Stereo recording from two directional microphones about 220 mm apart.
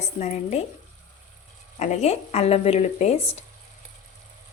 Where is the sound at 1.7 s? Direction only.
30° left (ahead or behind).